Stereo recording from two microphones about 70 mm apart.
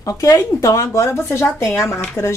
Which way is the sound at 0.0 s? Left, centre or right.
Left.